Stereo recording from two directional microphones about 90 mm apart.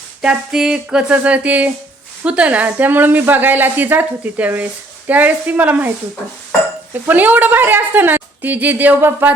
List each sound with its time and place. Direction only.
0.2 s a woman's voice: 5° right (ahead or behind)
7.1 s a woman's voice: 20° right (ahead or behind)